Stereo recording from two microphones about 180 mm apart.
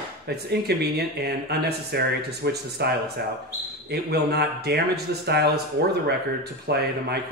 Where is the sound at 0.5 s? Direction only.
65° right (ahead or behind).